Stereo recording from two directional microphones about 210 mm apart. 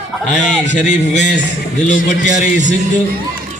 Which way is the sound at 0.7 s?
35° left (ahead or behind).